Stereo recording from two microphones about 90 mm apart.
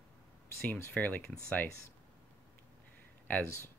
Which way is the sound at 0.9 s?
15° left (ahead or behind).